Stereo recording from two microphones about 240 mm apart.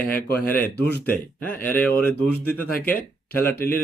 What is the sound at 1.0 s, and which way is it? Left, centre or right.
Speech, centre.